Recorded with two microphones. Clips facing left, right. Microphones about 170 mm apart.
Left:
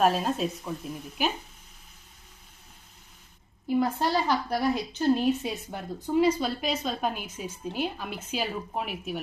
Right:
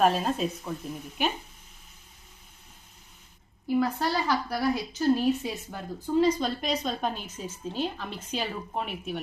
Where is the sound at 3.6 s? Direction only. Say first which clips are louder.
Even; 20° left (ahead or behind).